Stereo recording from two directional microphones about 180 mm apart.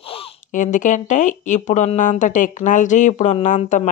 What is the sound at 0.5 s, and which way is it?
Speech, 45° left (ahead or behind).